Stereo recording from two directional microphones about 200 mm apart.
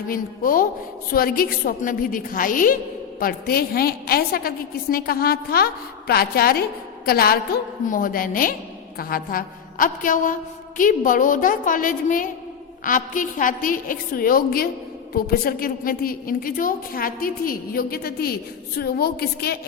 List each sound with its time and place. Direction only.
0.1 s a woman's voice: 45° left (ahead or behind)